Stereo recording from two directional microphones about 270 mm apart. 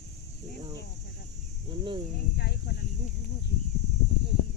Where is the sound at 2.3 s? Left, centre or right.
Left.